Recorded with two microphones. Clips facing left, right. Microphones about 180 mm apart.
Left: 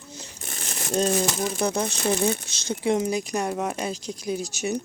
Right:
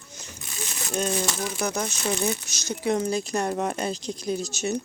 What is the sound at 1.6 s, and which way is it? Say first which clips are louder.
Speech: left 3 dB; 30° left (ahead or behind).